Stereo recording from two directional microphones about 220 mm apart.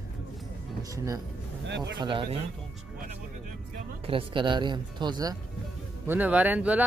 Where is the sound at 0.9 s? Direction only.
15° right (ahead or behind).